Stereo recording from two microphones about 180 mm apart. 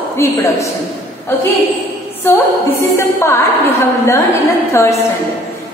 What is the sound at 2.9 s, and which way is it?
A woman's voice, 15° left (ahead or behind).